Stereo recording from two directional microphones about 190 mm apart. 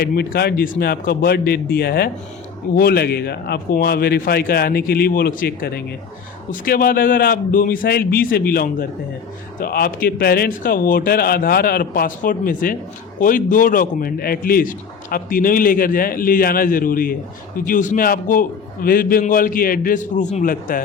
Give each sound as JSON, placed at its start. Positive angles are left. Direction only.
{"t": 0.0, "sound": "a man's voice", "side_deg": 50}